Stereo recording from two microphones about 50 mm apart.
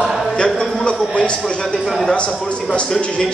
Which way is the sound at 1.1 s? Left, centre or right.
Left.